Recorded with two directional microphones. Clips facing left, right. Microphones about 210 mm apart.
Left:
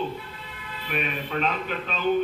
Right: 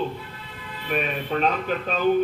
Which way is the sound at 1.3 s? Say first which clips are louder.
Right 4 dB; 40° right (ahead or behind).